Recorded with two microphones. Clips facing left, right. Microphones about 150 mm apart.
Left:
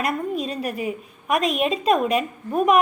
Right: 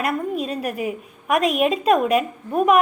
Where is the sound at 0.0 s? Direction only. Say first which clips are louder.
Right 1 dB; 5° right (ahead or behind).